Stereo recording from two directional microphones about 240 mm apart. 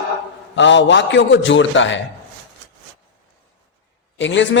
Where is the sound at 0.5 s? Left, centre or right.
Left.